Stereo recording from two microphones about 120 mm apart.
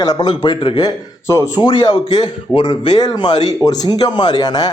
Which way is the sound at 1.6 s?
40° left (ahead or behind).